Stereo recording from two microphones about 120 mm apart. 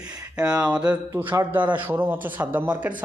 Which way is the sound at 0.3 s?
10° right (ahead or behind).